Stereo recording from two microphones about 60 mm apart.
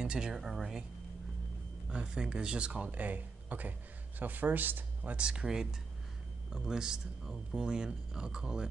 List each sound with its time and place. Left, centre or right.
0.0 s speech: centre
1.9 s speech: centre; by 5.1 s right
5.1 s speech: centre